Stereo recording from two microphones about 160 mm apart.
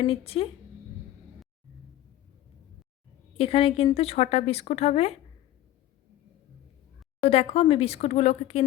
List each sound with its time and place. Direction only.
0.0 s speech: 35° left (ahead or behind)
3.3 s speech: 35° left (ahead or behind)
7.2 s speech: 40° left (ahead or behind)